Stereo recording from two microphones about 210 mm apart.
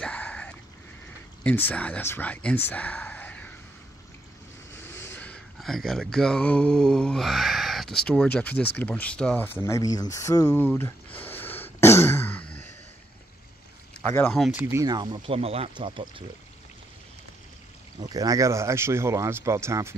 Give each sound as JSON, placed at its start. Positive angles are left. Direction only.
{"t": 0.0, "sound": "a sound", "side_deg": 5}
{"t": 1.4, "sound": "speech", "side_deg": 10}
{"t": 4.7, "sound": "speech", "side_deg": 10}
{"t": 10.1, "sound": "throat clearing", "side_deg": 15}
{"t": 14.1, "sound": "speech", "side_deg": 5}
{"t": 14.6, "sound": "speech", "side_deg": -15}
{"t": 18.0, "sound": "speech", "side_deg": -15}